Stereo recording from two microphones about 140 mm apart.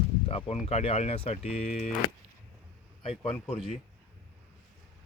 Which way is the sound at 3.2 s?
45° left (ahead or behind).